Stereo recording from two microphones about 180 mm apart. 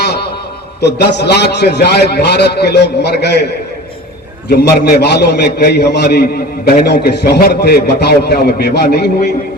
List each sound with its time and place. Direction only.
0.8 s a man's voice: 65° left (ahead or behind)